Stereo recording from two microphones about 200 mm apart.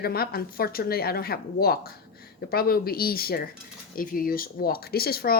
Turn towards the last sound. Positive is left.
turn(degrees=50)  # may be behind; listen again after turning